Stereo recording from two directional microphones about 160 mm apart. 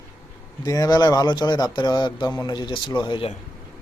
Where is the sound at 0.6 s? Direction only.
25° left (ahead or behind).